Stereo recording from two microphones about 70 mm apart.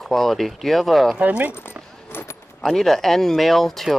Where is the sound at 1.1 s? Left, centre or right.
Right.